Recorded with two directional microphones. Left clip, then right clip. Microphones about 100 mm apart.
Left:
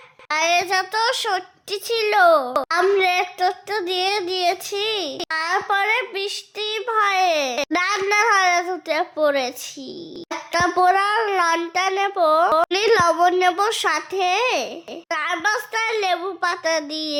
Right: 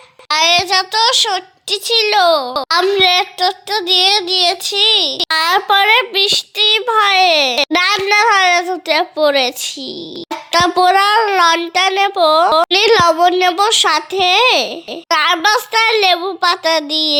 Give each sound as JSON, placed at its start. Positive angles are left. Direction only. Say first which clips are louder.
{"t": 0.3, "sound": "a child's voice", "louder": "right 7 dB", "side_deg": -5}
{"t": 5.3, "sound": "a child's voice", "louder": "right 8 dB", "side_deg": -55}
{"t": 10.5, "sound": "a child's voice", "louder": "right 6 dB", "side_deg": -30}